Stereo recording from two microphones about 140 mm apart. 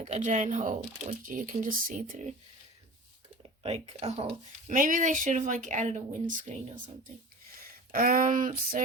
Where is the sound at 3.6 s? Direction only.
50° right (ahead or behind).